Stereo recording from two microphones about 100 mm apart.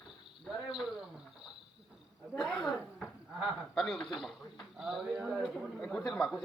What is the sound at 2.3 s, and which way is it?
A man's voice, 10° left (ahead or behind).